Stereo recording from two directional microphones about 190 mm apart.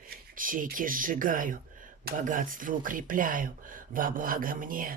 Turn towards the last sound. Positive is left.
turn(degrees=-45)  # may be behind; listen again after turning